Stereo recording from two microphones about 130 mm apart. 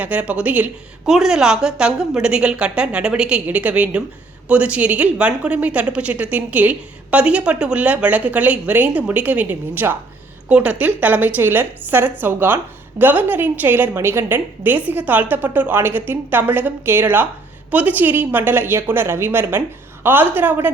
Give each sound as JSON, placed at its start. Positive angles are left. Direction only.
{"t": 0.0, "sound": "speech", "side_deg": -10}